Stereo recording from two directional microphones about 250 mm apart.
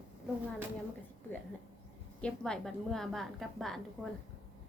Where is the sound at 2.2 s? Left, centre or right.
Centre.